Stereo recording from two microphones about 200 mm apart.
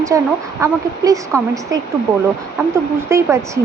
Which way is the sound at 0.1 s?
15° right (ahead or behind).